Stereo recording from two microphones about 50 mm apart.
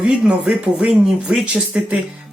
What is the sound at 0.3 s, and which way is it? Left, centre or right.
Speech, right.